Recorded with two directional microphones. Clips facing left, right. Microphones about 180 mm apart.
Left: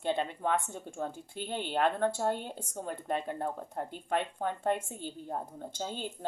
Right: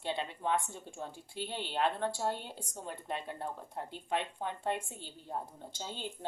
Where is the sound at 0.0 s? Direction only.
50° left (ahead or behind).